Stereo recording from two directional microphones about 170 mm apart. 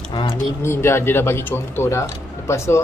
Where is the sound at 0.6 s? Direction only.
15° left (ahead or behind).